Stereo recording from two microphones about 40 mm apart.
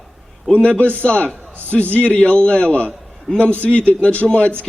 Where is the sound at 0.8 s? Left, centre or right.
Left.